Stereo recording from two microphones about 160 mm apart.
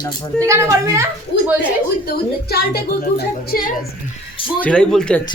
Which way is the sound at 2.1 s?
85° left.